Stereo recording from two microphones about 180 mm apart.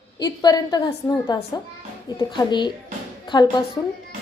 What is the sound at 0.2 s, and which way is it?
A woman's voice, 20° left (ahead or behind).